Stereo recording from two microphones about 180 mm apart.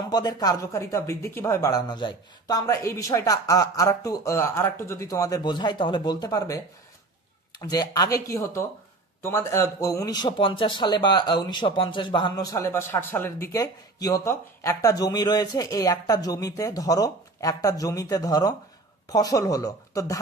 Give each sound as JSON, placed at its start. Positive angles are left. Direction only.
{"t": 0.1, "sound": "speech", "side_deg": 25}
{"t": 7.6, "sound": "speech", "side_deg": 20}